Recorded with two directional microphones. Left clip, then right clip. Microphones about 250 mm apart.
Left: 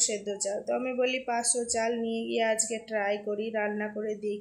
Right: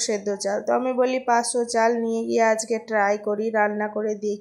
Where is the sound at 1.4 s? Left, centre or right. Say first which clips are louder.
Right 7 dB; centre.